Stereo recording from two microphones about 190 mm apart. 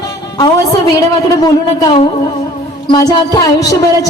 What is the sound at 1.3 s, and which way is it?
A woman's voice, 20° left (ahead or behind).